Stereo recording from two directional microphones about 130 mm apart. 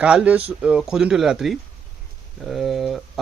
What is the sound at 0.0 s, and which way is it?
Speech, 10° right (ahead or behind).